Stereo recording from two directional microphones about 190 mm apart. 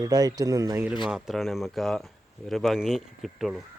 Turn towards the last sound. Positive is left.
turn(degrees=0)  # may be behind; listen again after turning